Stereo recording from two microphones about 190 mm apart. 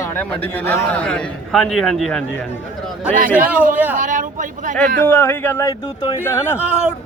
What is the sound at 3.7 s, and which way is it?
Speech, 10° right (ahead or behind).